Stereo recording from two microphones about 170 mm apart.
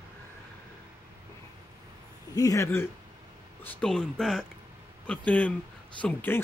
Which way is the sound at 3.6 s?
5° left (ahead or behind).